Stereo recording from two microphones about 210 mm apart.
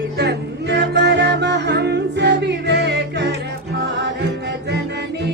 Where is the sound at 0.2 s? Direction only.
55° right (ahead or behind).